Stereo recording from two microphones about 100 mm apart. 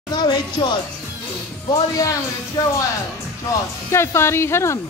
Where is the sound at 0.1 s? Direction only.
45° left (ahead or behind).